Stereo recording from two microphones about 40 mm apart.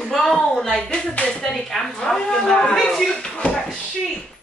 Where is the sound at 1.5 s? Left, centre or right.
Centre.